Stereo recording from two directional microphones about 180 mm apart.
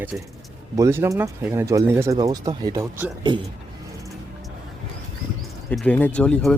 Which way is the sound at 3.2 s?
25° right (ahead or behind).